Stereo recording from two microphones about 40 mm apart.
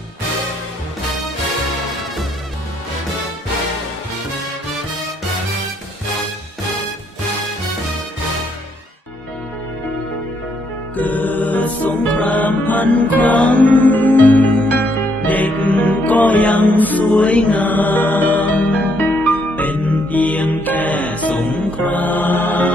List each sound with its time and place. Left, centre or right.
11.0 s music: left